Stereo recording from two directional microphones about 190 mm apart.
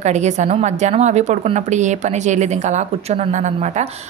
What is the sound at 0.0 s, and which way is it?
A woman's voice, 35° right (ahead or behind).